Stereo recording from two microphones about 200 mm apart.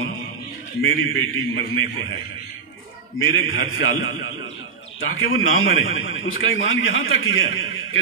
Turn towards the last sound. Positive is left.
turn(degrees=80)